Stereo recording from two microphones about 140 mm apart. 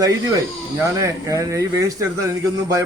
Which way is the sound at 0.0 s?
25° right (ahead or behind).